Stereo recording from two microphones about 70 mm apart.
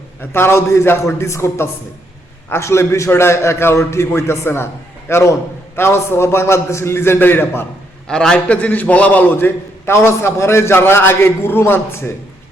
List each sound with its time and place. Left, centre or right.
0.2 s a man's voice: left
8.0 s a man's voice: centre; by 12.1 s left